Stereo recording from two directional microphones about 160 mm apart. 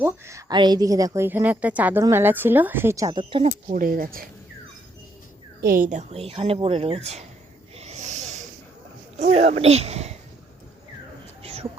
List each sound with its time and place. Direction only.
0.0 s a woman's voice: 20° right (ahead or behind)
3.7 s speech: 60° right (ahead or behind)
5.6 s speech: 60° right (ahead or behind); by 7.3 s 40° right (ahead or behind)
7.8 s a sound: 45° right (ahead or behind)
9.1 s speech: 45° right (ahead or behind)